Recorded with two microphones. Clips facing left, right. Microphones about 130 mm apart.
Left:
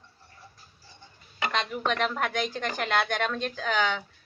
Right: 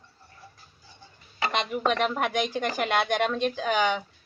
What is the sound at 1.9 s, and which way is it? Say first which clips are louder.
Speech: right 2 dB; 5° right (ahead or behind).